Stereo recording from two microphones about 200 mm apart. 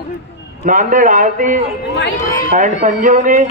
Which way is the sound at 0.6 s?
40° right (ahead or behind).